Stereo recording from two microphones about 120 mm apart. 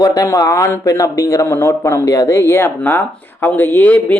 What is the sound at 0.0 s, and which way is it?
Speech, 30° left (ahead or behind).